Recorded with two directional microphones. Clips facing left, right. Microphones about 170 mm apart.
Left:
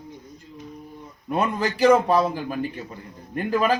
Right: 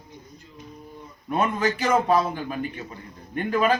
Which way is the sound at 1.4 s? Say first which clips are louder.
Left 3 dB; 35° left (ahead or behind).